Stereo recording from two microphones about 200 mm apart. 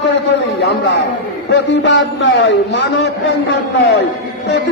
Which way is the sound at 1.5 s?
60° left (ahead or behind).